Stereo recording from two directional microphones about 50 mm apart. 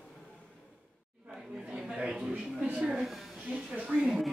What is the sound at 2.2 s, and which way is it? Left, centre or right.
A woman's voice, centre.